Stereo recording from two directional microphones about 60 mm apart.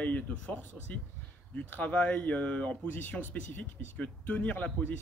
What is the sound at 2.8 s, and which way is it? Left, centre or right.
A man's voice, left.